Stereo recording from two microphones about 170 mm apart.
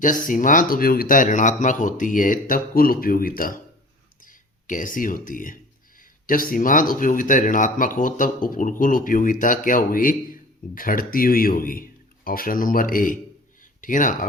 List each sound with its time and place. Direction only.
0.0 s a man's voice: 50° left (ahead or behind)